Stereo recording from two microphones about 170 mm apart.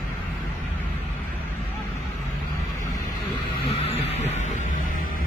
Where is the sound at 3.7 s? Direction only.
35° left (ahead or behind); by 5.3 s 55° left (ahead or behind).